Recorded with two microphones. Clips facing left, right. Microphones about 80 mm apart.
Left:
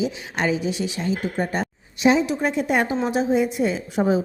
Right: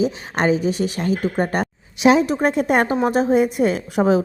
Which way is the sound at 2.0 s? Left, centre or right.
Right.